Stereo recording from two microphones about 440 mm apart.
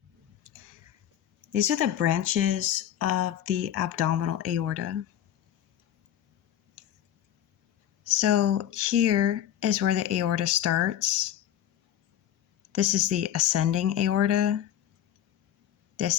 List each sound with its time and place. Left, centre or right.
1.5 s speech: right
8.0 s speech: right
12.7 s speech: right